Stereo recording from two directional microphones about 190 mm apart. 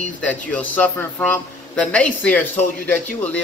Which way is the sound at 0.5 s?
10° left (ahead or behind).